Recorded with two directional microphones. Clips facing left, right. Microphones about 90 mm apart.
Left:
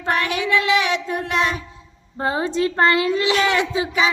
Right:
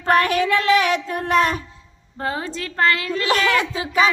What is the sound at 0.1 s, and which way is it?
Child singing, 45° right (ahead or behind).